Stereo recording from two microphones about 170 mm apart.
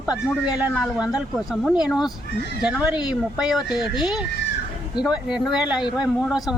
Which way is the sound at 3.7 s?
25° left (ahead or behind).